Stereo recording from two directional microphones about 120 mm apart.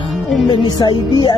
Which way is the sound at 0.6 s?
40° left (ahead or behind).